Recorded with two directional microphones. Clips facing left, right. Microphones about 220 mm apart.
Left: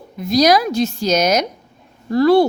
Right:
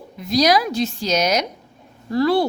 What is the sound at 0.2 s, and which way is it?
A woman's voice, 45° left (ahead or behind).